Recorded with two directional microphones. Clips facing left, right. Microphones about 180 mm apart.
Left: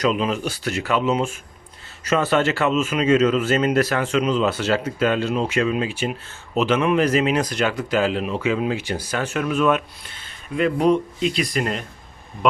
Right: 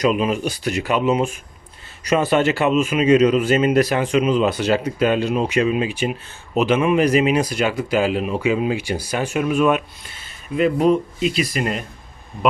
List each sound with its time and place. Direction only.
0.0 s speech: 10° right (ahead or behind)